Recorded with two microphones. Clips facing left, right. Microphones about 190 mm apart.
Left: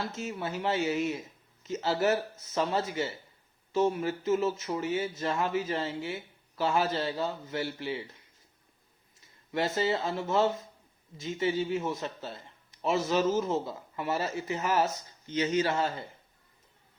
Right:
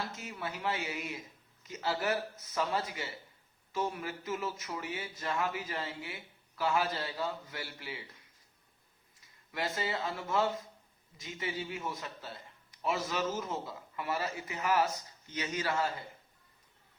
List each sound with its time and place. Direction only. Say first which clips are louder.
0.1 s a man's voice: left 6 dB; 25° left (ahead or behind)
9.5 s a man's voice: left 7 dB; 25° left (ahead or behind)